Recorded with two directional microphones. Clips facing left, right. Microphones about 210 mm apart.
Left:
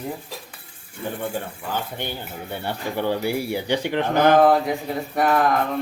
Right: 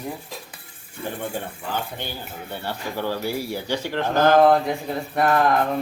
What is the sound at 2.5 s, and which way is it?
Speech, 20° left (ahead or behind).